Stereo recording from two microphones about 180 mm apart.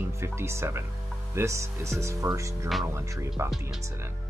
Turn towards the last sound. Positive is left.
turn(degrees=-15)  # may be behind; listen again after turning